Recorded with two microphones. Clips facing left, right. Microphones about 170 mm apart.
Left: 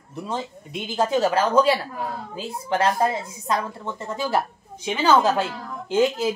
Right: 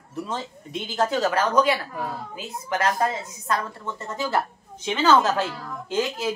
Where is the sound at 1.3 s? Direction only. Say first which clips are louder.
Left 2 dB; 30° left (ahead or behind).